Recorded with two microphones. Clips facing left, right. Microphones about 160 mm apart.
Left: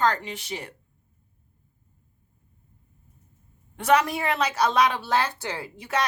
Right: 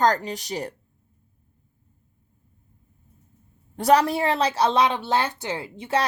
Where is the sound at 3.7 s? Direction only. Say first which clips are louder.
Right 3 dB; 35° right (ahead or behind).